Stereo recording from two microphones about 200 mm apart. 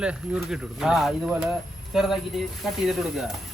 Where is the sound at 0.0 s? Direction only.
5° right (ahead or behind).